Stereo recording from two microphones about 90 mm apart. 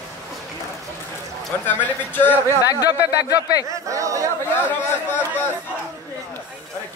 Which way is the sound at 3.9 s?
40° right (ahead or behind).